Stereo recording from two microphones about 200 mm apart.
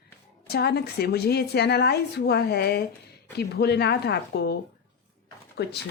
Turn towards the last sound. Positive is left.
turn(degrees=55)  # may be behind; listen again after turning